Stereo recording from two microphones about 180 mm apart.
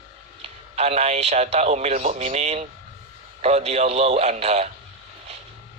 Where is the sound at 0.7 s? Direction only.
35° right (ahead or behind).